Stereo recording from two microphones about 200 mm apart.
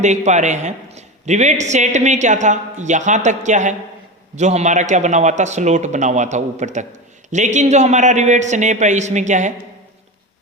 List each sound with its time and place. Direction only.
0.0 s a man's voice: 35° right (ahead or behind)